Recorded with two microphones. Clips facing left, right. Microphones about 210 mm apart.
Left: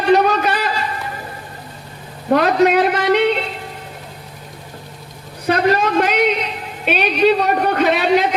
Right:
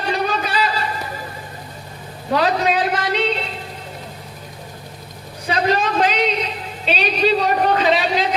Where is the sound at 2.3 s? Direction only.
60° left (ahead or behind).